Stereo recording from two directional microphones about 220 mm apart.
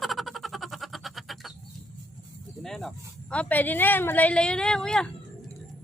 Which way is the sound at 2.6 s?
Centre (ahead or behind).